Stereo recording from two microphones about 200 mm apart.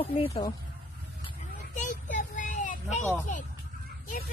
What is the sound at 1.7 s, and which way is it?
Child singing, 40° left (ahead or behind).